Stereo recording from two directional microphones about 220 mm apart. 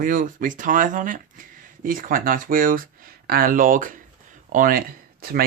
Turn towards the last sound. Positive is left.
turn(degrees=-40)  # may be behind; listen again after turning